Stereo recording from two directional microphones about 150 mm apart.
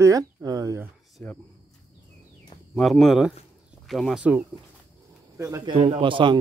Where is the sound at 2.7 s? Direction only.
5° left (ahead or behind).